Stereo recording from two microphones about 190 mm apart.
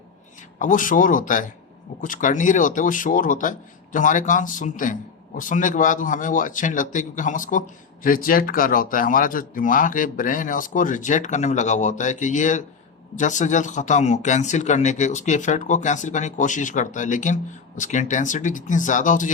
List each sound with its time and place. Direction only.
0.6 s speech: 45° left (ahead or behind)